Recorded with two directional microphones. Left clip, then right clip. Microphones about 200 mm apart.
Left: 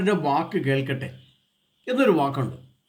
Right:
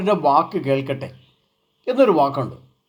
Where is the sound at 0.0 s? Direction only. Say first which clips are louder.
Right 6 dB; 10° left (ahead or behind).